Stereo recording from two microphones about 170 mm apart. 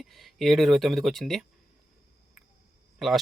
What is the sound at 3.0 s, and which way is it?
Speech, centre (ahead or behind).